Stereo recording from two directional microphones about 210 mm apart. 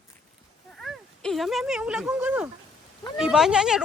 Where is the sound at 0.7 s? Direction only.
Centre (ahead or behind).